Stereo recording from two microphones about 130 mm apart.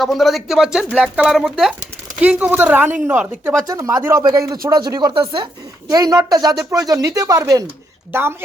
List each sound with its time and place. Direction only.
0.0 s speech: centre (ahead or behind)
2.2 s a woman's voice: 15° right (ahead or behind)
3.7 s speech: 25° right (ahead or behind)